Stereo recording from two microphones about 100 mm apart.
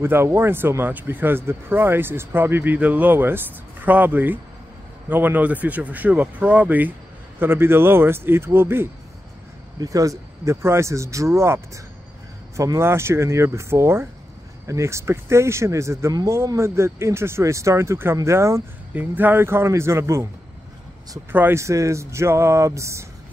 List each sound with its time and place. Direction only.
0.0 s speech: 25° right (ahead or behind)
9.8 s speech: 35° right (ahead or behind)
21.3 s speech: 20° right (ahead or behind)